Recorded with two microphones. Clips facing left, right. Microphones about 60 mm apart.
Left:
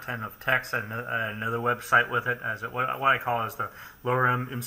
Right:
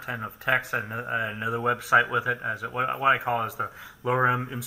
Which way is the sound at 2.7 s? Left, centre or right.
Centre.